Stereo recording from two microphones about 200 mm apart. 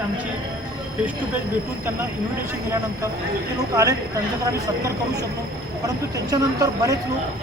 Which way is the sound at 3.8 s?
15° right (ahead or behind).